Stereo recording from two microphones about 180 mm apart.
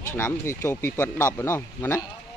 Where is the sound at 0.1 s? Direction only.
15° left (ahead or behind).